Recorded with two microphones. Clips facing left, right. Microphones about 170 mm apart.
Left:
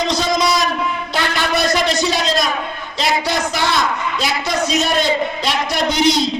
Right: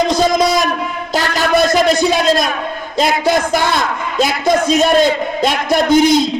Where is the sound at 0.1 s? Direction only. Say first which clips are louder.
Right 4 dB; 50° right (ahead or behind).